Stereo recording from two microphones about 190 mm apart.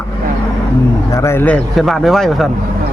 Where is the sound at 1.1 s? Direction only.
15° left (ahead or behind).